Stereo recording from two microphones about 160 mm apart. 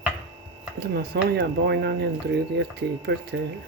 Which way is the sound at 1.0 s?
90° right.